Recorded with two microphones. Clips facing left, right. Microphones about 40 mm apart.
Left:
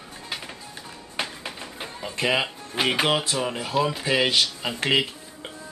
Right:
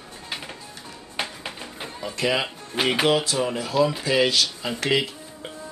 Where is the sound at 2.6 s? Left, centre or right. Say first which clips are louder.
Right 1 dB; centre.